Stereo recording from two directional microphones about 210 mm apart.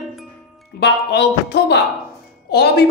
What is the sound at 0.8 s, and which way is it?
Music, 55° left (ahead or behind).